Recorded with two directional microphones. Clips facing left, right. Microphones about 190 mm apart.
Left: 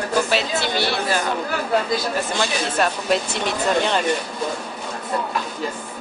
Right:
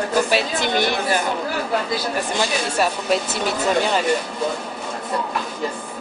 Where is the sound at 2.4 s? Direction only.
5° right (ahead or behind).